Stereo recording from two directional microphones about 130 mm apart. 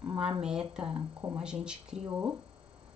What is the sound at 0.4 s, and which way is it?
Speech, 5° right (ahead or behind).